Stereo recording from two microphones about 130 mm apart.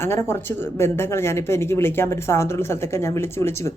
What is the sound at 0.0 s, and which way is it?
Speech, 20° left (ahead or behind).